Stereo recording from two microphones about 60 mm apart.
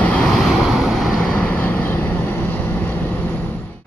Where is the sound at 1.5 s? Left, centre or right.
Left.